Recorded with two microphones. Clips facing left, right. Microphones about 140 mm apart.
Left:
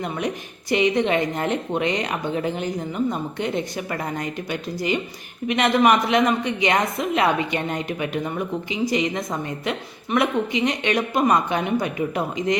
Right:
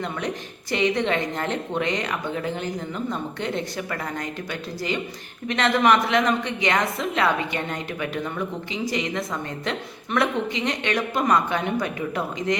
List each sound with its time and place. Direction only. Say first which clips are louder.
0.7 s a woman's voice: left 3 dB; 15° left (ahead or behind)
5.5 s a woman's voice: left 2 dB; 15° left (ahead or behind)